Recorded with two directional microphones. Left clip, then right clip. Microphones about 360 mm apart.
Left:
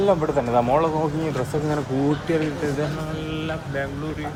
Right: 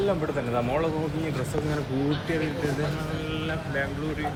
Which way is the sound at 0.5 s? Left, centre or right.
Centre.